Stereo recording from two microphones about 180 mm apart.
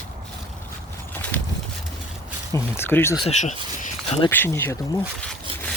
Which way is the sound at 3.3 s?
40° left (ahead or behind).